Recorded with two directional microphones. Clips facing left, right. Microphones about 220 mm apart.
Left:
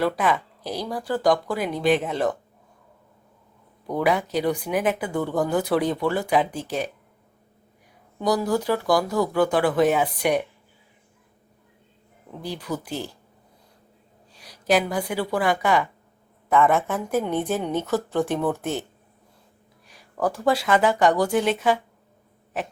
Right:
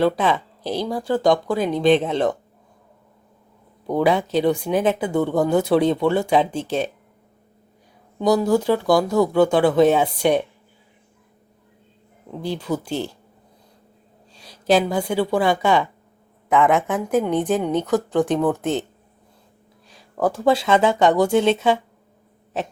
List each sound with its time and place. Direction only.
0.0 s speech: 25° right (ahead or behind)
3.8 s speech: 25° right (ahead or behind)
8.2 s speech: 25° right (ahead or behind)
12.4 s speech: 25° right (ahead or behind)
14.3 s a sound: 25° right (ahead or behind)
15.3 s a woman's voice: 25° right (ahead or behind)
19.9 s a sound: 25° right (ahead or behind)
20.3 s speech: 25° right (ahead or behind)